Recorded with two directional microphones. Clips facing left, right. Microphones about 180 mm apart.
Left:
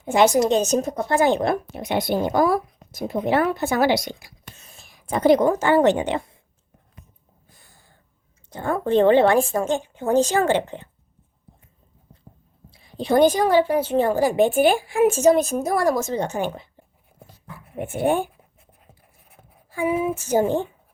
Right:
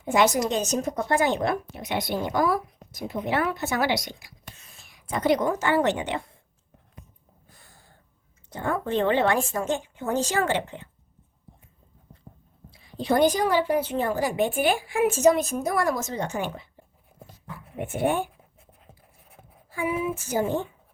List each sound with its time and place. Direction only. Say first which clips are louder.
0.1 s a woman's voice: left 5 dB; 25° left (ahead or behind)
1.6 s speech: left 5 dB; 50° left (ahead or behind)
2.1 s a woman's voice: left 4 dB; 30° left (ahead or behind)
8.7 s a woman's voice: left 8 dB; 35° left (ahead or behind)
13.0 s a woman's voice: left 4 dB; 25° left (ahead or behind)
19.7 s a woman's voice: left 5 dB; 25° left (ahead or behind)